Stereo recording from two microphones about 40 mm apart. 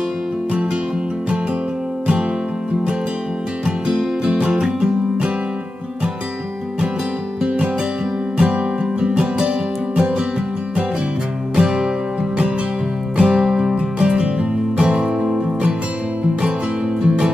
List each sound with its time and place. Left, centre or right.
3.6 s music: centre
7.4 s music: right
11.5 s music: centre
13.2 s music: centre
13.7 s music: right
17.0 s music: right